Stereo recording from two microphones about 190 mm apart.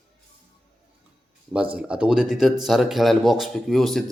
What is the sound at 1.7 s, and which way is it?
A man's voice, 5° right (ahead or behind).